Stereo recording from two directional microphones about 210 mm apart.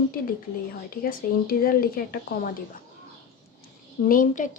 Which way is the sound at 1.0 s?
45° left (ahead or behind).